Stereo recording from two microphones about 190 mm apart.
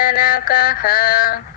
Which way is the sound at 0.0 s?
50° left (ahead or behind).